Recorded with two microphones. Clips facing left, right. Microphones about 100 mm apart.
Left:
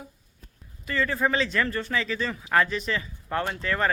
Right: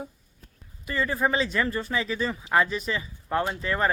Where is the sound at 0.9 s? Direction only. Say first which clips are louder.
Even; 15° right (ahead or behind).